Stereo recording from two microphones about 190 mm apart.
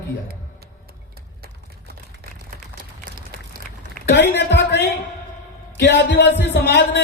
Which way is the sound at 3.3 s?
50° right (ahead or behind).